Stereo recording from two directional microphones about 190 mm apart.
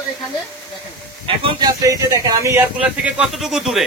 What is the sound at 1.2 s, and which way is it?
Speech, 25° right (ahead or behind).